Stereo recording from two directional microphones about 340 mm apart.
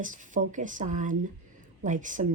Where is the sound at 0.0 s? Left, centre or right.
Right.